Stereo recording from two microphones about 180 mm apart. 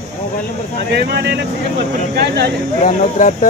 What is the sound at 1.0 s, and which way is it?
Speech, 65° right (ahead or behind).